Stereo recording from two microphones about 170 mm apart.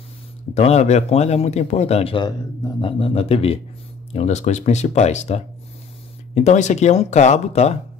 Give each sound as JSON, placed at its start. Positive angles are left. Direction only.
{"t": 0.6, "sound": "speech", "side_deg": 40}